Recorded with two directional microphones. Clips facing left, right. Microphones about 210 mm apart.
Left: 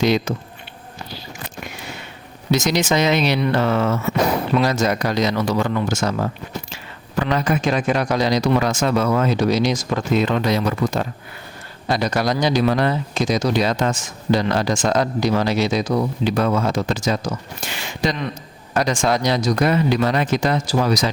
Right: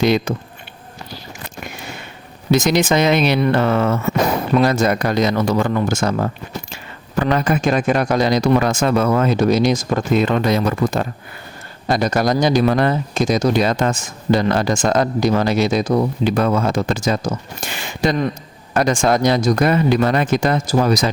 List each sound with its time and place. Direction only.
0.0 s speech: 55° right (ahead or behind)
2.5 s speech: 55° right (ahead or behind)